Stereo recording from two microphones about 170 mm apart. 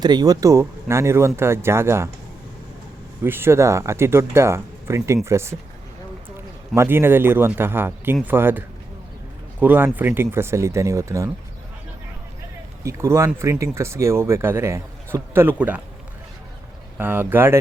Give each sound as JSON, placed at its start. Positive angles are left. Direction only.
{"t": 0.0, "sound": "speech", "side_deg": -25}
{"t": 3.2, "sound": "speech", "side_deg": -15}
{"t": 6.7, "sound": "speech", "side_deg": -15}
{"t": 12.8, "sound": "speech", "side_deg": -15}
{"t": 17.0, "sound": "speech", "side_deg": -10}